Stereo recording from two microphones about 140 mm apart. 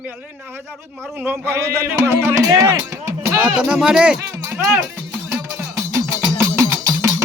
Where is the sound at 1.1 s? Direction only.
15° right (ahead or behind).